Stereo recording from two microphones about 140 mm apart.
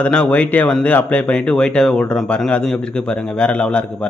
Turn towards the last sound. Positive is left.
turn(degrees=5)  # may be behind; listen again after turning